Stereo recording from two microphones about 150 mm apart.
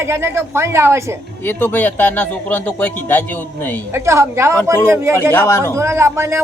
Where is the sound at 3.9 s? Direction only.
20° right (ahead or behind).